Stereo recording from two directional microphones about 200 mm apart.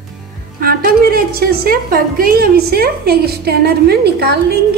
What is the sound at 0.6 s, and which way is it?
A woman's voice, 50° right (ahead or behind).